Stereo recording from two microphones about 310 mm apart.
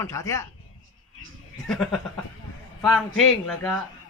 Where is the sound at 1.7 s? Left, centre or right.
Centre.